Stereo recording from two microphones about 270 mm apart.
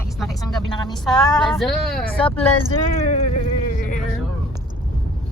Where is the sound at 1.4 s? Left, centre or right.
Centre.